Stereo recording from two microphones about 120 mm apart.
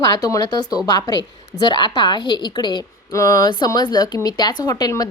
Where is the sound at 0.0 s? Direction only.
30° left (ahead or behind).